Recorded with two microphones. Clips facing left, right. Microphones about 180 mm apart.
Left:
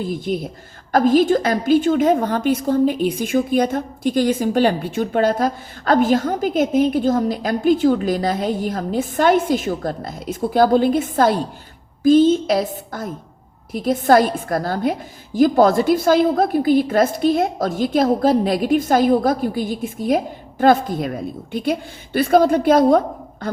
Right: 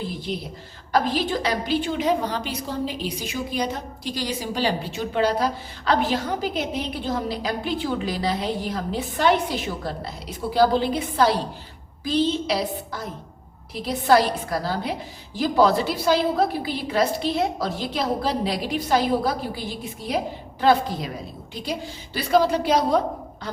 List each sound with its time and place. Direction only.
0.0 s a woman's voice: 45° left (ahead or behind)